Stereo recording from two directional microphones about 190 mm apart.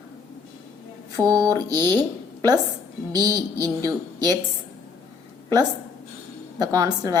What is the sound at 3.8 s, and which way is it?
Speech, 20° right (ahead or behind).